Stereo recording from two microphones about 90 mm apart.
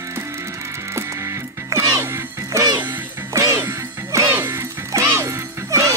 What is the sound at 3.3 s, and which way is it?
Music, 35° right (ahead or behind).